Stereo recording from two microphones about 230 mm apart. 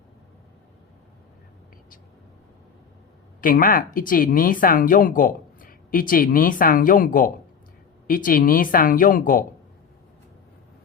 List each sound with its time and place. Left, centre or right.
3.4 s speech: left